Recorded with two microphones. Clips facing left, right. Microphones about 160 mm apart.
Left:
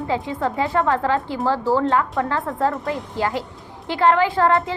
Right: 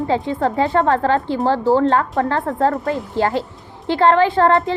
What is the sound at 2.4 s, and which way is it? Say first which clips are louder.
Speech: right 4 dB; 45° right (ahead or behind).